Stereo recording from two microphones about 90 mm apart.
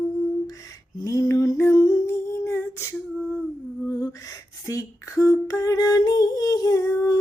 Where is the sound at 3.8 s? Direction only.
40° left (ahead or behind).